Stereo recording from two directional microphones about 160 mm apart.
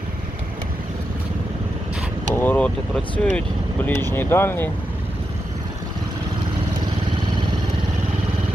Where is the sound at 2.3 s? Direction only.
10° left (ahead or behind).